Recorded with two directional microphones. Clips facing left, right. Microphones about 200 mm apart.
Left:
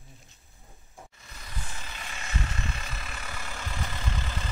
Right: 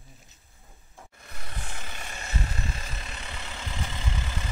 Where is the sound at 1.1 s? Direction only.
60° right (ahead or behind).